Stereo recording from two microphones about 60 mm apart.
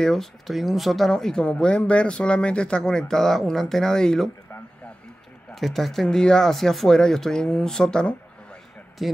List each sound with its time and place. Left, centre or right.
0.0 s speech: centre
5.5 s speech: centre
9.0 s speech: centre